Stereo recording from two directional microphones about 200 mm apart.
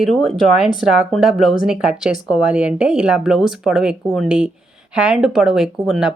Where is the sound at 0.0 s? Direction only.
Centre (ahead or behind).